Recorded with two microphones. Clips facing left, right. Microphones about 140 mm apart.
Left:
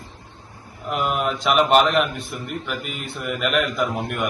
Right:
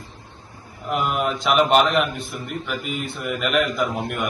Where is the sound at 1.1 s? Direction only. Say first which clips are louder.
Left 1 dB; centre (ahead or behind).